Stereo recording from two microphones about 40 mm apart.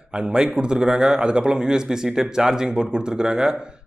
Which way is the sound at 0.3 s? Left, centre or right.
Right.